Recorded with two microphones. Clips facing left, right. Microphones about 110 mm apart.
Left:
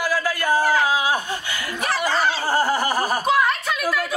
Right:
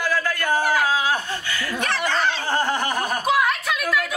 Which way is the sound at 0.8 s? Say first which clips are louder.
Left 1 dB; 10° left (ahead or behind).